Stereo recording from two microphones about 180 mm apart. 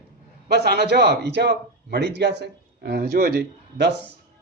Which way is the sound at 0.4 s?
65° right (ahead or behind).